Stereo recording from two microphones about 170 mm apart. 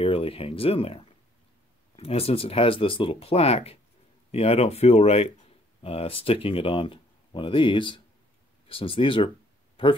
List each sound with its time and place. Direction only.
0.0 s speech: 35° left (ahead or behind)